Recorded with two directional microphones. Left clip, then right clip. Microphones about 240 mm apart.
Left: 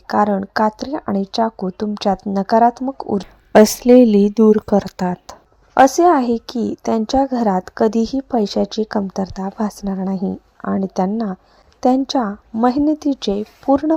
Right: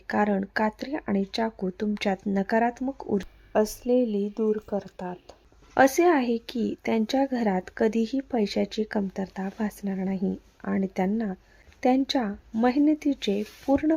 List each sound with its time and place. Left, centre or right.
0.1 s a woman's voice: centre
1.6 s speech: centre
2.5 s a woman's voice: centre
3.5 s speech: left
5.9 s a woman's voice: centre
12.1 s speech: centre
12.6 s a woman's voice: centre